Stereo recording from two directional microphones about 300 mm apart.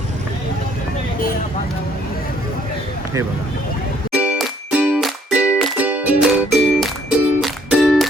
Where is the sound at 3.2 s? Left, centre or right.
Centre.